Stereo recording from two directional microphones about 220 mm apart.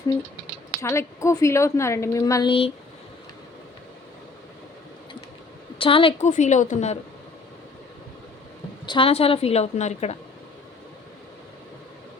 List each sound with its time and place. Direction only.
0.8 s a woman's voice: 15° left (ahead or behind)
5.8 s a woman's voice: 25° left (ahead or behind)
8.9 s a woman's voice: 25° left (ahead or behind)